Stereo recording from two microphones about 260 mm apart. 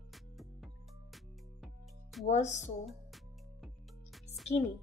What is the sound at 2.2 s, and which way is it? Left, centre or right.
Speech, left.